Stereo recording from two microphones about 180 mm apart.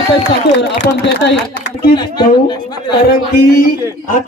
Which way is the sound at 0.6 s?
70° left (ahead or behind).